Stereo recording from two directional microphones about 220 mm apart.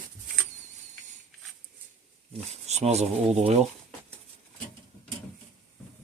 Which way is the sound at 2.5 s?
30° right (ahead or behind).